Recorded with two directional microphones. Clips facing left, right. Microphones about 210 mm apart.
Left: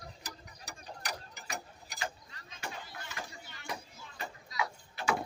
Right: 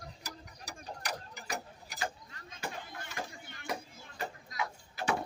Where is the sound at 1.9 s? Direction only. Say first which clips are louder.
Right 2 dB; 50° right (ahead or behind).